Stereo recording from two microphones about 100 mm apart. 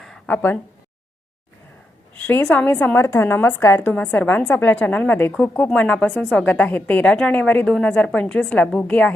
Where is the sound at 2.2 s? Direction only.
15° left (ahead or behind).